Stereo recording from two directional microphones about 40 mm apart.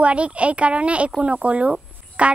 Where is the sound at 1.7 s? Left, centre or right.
Right.